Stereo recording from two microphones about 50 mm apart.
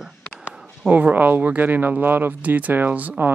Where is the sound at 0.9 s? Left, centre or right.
Right.